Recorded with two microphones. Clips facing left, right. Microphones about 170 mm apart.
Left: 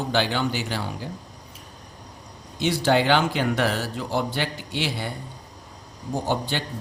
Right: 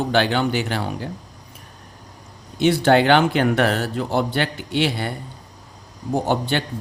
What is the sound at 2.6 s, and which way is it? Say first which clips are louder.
A man's voice: right 5 dB; 60° right (ahead or behind).